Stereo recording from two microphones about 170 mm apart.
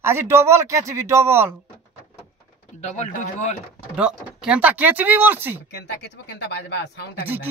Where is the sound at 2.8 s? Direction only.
45° left (ahead or behind).